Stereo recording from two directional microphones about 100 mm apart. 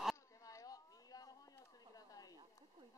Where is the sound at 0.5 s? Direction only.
35° left (ahead or behind).